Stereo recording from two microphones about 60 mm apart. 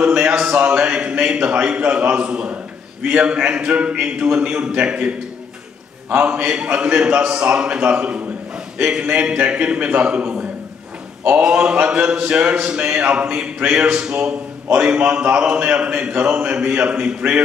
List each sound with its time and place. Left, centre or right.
0.0 s a man's voice: centre
11.4 s a man's voice: centre